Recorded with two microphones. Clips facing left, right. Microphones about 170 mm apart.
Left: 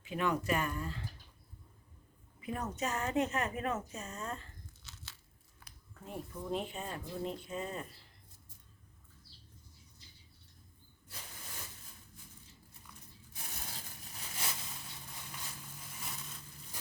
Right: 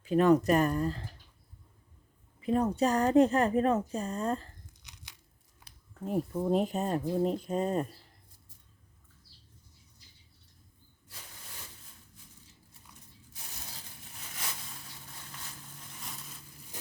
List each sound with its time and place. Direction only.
0.0 s speech: 40° right (ahead or behind)
2.4 s speech: 30° right (ahead or behind)
4.8 s tearing: 15° right (ahead or behind)
6.1 s speech: 45° right (ahead or behind)